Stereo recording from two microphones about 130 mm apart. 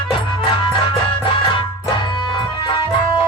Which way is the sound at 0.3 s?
40° left (ahead or behind).